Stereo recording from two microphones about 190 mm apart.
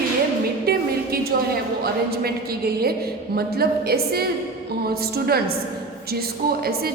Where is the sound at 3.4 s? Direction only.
55° right (ahead or behind).